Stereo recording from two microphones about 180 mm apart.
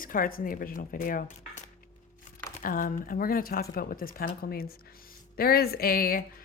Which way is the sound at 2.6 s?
45° left (ahead or behind).